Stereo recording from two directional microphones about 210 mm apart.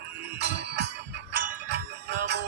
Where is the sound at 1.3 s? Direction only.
55° right (ahead or behind).